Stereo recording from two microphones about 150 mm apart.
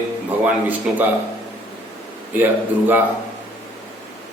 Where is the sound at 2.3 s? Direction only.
15° right (ahead or behind).